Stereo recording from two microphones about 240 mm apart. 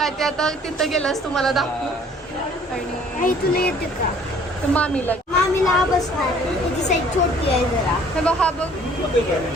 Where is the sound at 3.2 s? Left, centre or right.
Left.